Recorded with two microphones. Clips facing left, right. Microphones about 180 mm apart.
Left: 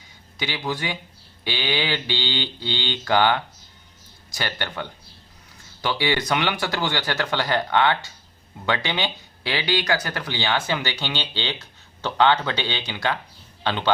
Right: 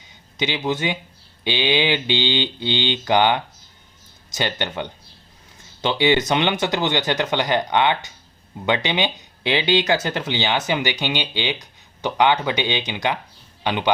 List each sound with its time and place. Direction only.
0.3 s a man's voice: 20° right (ahead or behind)